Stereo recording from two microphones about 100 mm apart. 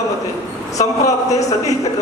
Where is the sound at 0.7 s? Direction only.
35° left (ahead or behind).